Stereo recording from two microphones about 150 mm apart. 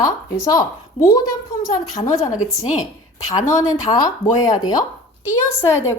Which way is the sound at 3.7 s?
25° left (ahead or behind).